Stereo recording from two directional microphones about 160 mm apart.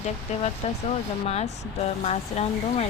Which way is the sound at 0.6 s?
40° left (ahead or behind).